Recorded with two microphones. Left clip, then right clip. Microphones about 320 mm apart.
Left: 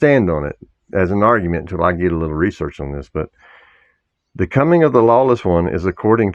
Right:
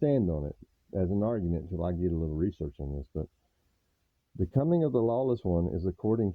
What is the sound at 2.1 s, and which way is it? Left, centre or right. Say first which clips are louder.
Speech: left 14 dB; right.